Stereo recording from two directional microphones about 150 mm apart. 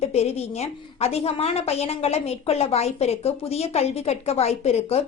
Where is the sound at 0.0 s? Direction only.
45° left (ahead or behind).